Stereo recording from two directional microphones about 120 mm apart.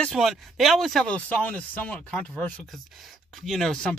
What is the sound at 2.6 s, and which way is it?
Speech, centre (ahead or behind).